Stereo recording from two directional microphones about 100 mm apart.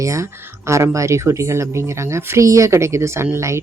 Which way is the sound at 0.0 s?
30° right (ahead or behind).